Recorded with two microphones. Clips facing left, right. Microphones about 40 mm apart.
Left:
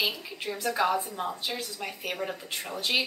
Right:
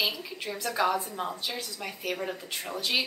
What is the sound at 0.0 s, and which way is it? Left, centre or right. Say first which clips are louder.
Speech: even; centre.